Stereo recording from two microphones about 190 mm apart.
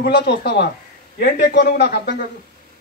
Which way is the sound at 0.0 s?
60° left (ahead or behind).